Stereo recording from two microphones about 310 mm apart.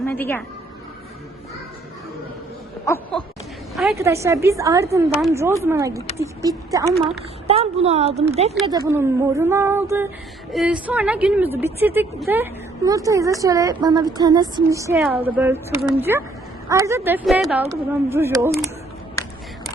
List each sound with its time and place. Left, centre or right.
0.0 s a woman's voice: centre
2.8 s a sound: centre
3.8 s a woman's voice: centre
8.7 s a woman's voice: centre